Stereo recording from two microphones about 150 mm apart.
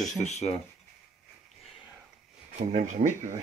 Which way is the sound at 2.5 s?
55° right (ahead or behind).